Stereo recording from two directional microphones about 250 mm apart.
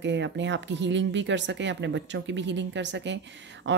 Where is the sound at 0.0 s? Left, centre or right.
Right.